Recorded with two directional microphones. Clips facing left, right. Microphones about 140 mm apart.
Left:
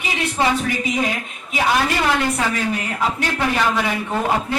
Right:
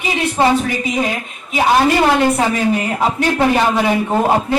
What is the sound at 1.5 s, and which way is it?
A woman's voice, 30° right (ahead or behind).